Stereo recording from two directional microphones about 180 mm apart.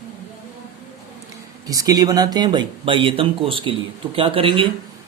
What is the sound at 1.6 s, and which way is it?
Speech, 20° right (ahead or behind).